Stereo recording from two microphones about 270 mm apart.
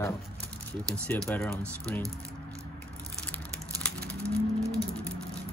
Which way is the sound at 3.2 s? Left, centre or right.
Centre.